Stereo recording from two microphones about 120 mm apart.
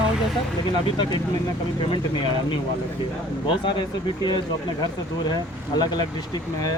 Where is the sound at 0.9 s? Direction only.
40° left (ahead or behind).